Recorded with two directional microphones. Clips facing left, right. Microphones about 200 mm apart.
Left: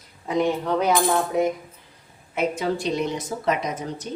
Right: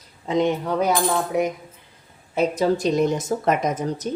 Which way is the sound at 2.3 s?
40° right (ahead or behind).